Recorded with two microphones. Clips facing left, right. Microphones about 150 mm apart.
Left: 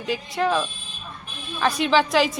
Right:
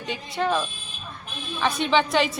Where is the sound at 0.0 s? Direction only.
Centre (ahead or behind).